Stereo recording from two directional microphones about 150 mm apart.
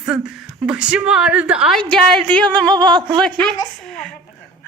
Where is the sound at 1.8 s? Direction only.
5° left (ahead or behind).